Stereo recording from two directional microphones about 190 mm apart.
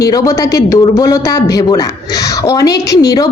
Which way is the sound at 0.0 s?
20° left (ahead or behind).